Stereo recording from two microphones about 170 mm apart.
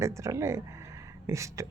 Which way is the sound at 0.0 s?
15° right (ahead or behind).